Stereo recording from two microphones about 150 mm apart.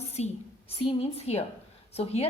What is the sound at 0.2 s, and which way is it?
A woman's voice, 50° left (ahead or behind).